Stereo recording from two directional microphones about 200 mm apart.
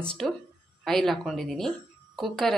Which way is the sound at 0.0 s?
5° left (ahead or behind).